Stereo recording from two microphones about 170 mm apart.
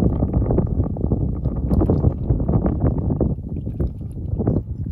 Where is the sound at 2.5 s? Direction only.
35° left (ahead or behind).